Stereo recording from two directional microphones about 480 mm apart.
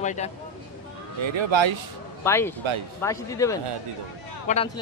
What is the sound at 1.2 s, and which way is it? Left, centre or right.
Speech, right.